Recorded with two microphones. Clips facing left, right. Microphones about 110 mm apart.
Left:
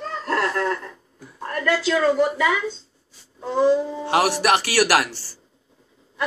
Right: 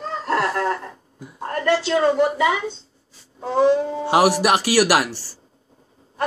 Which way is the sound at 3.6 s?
65° right (ahead or behind).